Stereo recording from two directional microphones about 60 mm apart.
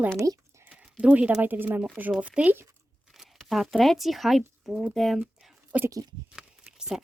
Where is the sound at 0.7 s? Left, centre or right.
Right.